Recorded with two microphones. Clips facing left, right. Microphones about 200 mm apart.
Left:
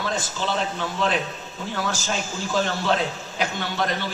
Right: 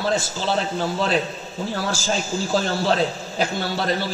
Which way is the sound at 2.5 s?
35° right (ahead or behind).